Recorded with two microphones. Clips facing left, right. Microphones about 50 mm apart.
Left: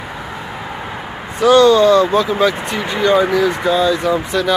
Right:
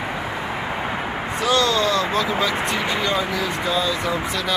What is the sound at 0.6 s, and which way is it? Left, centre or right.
Vehicle, right.